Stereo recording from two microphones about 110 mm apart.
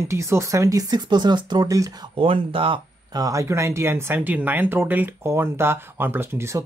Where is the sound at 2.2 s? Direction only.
55° right (ahead or behind).